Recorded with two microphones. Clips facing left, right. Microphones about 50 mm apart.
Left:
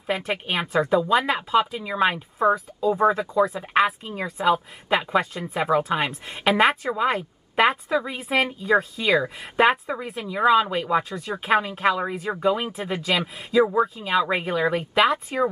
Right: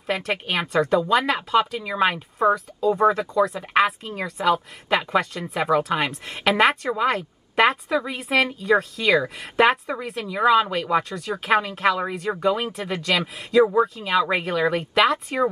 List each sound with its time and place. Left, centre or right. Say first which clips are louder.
0.3 s speech: right 1 dB; centre
11.6 s speech: right 1 dB; centre
13.9 s speech: right 1 dB; centre